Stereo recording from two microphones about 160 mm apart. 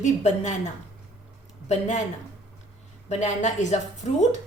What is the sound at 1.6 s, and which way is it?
Speech, 50° left (ahead or behind).